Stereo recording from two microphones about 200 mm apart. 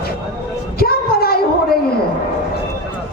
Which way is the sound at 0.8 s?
50° left (ahead or behind).